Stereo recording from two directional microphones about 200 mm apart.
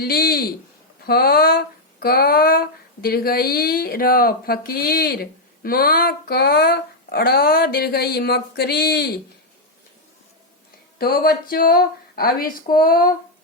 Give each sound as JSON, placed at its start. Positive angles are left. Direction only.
{"t": 0.0, "sound": "speech", "side_deg": 50}
{"t": 10.9, "sound": "speech", "side_deg": 50}